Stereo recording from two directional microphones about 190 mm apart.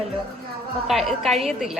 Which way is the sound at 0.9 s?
Centre (ahead or behind).